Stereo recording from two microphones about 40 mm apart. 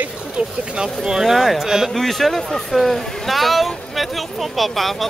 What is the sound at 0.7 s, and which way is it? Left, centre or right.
Speech, centre.